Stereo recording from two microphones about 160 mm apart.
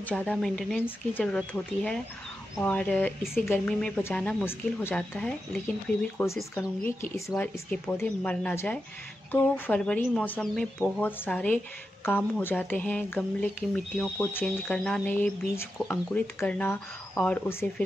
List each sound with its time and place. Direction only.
0.0 s speech: 5° left (ahead or behind)
6.1 s speech: 15° left (ahead or behind)